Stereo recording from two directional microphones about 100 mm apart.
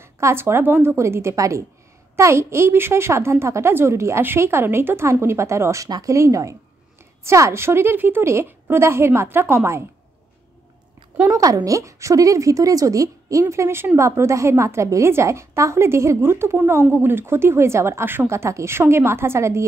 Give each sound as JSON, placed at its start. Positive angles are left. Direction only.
{"t": 0.0, "sound": "speech", "side_deg": -25}
{"t": 11.2, "sound": "speech", "side_deg": -35}